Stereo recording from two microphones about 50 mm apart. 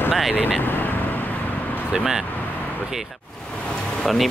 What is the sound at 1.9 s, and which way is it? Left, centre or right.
Speech, centre.